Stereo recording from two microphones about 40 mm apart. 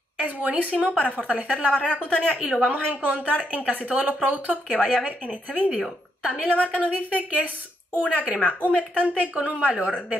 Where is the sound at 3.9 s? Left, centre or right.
Right.